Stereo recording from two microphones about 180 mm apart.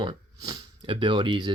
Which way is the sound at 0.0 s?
25° right (ahead or behind).